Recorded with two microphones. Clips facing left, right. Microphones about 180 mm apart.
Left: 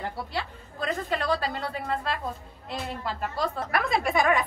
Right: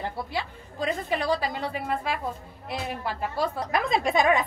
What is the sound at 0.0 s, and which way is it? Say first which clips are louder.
A woman's voice: right 1 dB; 15° right (ahead or behind).